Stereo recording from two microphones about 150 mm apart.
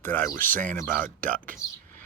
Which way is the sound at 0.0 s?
15° left (ahead or behind).